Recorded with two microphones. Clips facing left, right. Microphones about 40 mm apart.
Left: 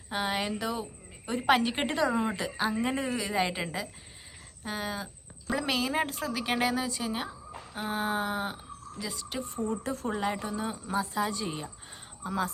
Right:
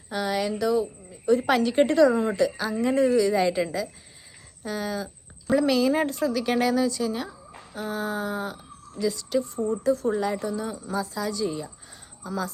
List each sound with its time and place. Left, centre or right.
0.1 s speech: left
9.0 s speech: centre
9.8 s speech: left